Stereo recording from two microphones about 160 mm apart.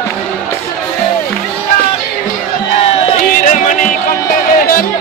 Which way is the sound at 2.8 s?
45° left (ahead or behind).